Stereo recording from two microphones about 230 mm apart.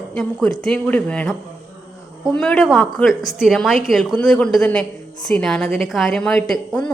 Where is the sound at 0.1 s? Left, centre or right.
Centre.